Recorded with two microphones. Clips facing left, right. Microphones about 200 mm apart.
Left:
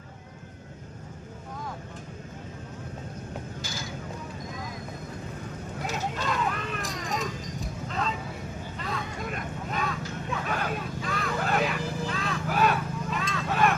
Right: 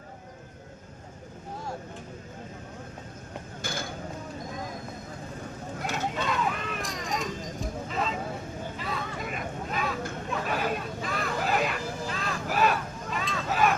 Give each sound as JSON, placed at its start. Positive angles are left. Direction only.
{"t": 3.6, "sound": "mechanisms", "side_deg": -55}
{"t": 5.8, "sound": "dog", "side_deg": 0}
{"t": 7.9, "sound": "vehicle", "side_deg": 0}